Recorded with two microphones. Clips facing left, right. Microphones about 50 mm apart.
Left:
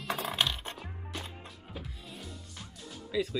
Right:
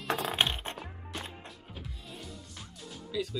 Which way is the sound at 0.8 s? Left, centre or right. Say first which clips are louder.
Right 1 dB; centre.